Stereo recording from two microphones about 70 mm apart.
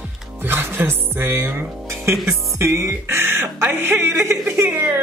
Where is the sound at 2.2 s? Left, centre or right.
Right.